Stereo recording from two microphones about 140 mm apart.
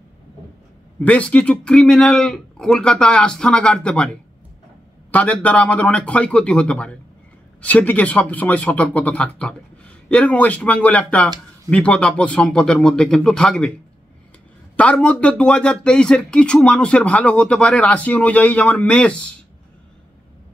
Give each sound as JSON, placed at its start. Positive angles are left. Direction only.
{"t": 1.0, "sound": "speech", "side_deg": 10}
{"t": 14.8, "sound": "speech", "side_deg": 10}